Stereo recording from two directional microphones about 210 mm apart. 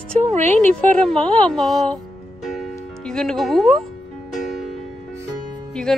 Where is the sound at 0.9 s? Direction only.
5° left (ahead or behind).